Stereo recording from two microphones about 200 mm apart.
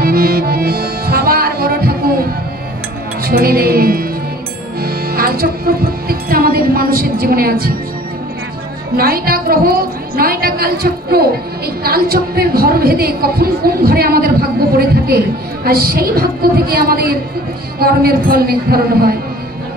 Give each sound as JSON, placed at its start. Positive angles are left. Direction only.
{"t": 0.0, "sound": "music", "side_deg": -50}
{"t": 3.2, "sound": "music", "side_deg": -50}
{"t": 8.9, "sound": "a woman's voice", "side_deg": -50}